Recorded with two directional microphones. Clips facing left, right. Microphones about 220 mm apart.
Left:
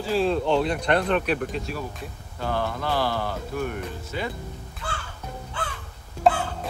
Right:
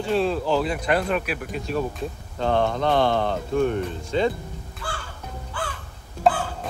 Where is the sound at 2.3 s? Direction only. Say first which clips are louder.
Right 6 dB; 25° right (ahead or behind).